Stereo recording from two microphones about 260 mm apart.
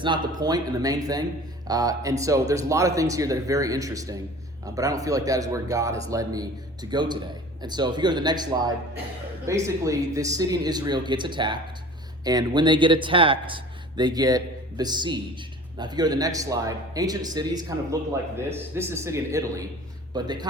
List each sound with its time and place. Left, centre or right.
0.0 s speech: centre